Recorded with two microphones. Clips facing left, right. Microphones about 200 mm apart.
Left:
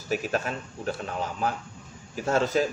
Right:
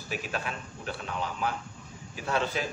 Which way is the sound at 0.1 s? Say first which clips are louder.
Left 7 dB; 40° left (ahead or behind).